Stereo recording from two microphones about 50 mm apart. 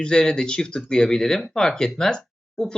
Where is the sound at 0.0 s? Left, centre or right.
Centre.